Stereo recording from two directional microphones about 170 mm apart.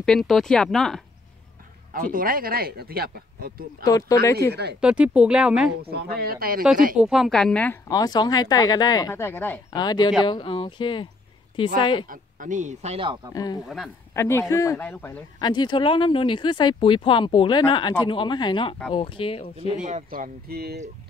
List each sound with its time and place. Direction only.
0.0 s speech: 5° left (ahead or behind)
2.0 s speech: 55° right (ahead or behind)
3.8 s speech: 20° left (ahead or behind)
4.7 s speech: 5° right (ahead or behind)
5.8 s speech: 65° right (ahead or behind)
7.0 s speech: centre (ahead or behind)
9.8 s speech: 25° left (ahead or behind)
12.1 s speech: 50° right (ahead or behind); by 13.3 s 30° right (ahead or behind)
13.3 s speech: 20° left (ahead or behind)
15.3 s speech: 25° left (ahead or behind)
19.8 s speech: 45° right (ahead or behind); by 20.8 s 65° right (ahead or behind)